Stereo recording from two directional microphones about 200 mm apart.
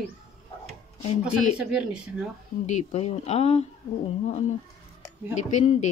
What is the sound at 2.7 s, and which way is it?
Speech, 35° left (ahead or behind).